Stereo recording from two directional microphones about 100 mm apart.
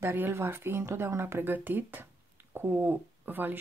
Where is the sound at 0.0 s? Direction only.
25° right (ahead or behind).